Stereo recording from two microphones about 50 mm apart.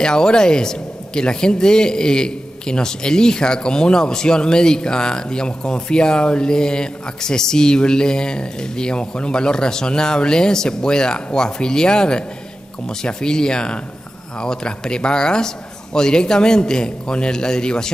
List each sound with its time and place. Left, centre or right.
0.0 s speech: centre